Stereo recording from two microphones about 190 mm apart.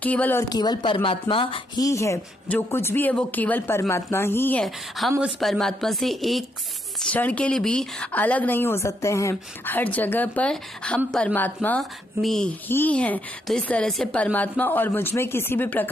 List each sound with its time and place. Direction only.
0.0 s speech: 10° left (ahead or behind); by 1.9 s 30° left (ahead or behind)
1.9 s a woman's voice: 15° left (ahead or behind)